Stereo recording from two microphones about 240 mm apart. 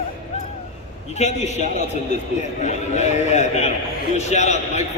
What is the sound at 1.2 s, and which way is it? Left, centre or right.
Speech, left.